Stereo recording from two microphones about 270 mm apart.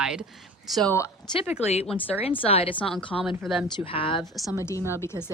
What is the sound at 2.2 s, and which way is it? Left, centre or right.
Speech, left.